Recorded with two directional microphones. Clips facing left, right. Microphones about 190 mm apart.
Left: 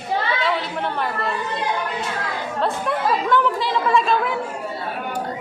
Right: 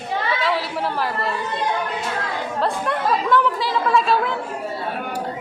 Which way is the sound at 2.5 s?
Centre (ahead or behind).